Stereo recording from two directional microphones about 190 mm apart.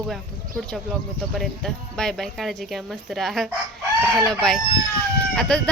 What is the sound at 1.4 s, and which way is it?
Speech, centre (ahead or behind).